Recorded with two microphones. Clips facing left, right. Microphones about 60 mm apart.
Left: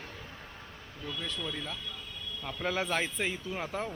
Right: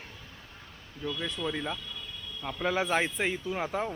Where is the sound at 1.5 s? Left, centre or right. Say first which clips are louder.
Right 5 dB; right.